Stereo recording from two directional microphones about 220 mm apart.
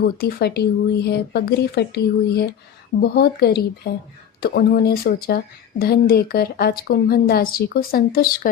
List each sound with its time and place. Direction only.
0.0 s speech: 45° left (ahead or behind)